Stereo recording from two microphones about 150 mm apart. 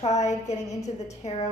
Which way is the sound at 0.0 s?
50° left (ahead or behind).